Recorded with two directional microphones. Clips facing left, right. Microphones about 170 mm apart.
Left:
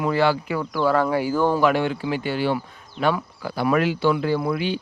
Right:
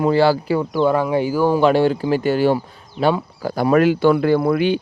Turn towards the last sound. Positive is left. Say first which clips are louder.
# right 7 dB
turn(degrees=-55)  # may be behind; listen again after turning